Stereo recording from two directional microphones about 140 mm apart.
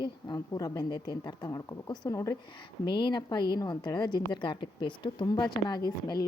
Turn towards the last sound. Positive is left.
turn(degrees=30)  # may be behind; listen again after turning